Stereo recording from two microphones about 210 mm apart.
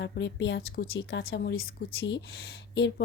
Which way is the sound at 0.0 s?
60° left (ahead or behind).